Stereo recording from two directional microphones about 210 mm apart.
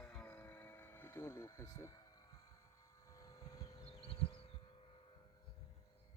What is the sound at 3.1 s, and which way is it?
Vehicle, 15° left (ahead or behind).